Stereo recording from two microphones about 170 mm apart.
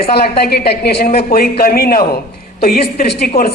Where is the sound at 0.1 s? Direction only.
70° left (ahead or behind).